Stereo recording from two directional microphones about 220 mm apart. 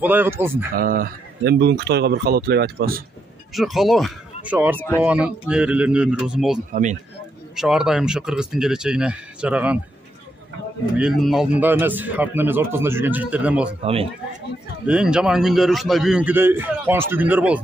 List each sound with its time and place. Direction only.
0.0 s speech: 10° right (ahead or behind)
0.7 s speech: 40° right (ahead or behind)
3.5 s a man's voice: centre (ahead or behind)
4.7 s speech: 10° left (ahead or behind)
5.0 s a man's voice: 5° right (ahead or behind)
6.7 s speech: 35° right (ahead or behind)
7.5 s a man's voice: 5° right (ahead or behind)
11.0 s speech: centre (ahead or behind)
14.9 s a man's voice: 5° right (ahead or behind)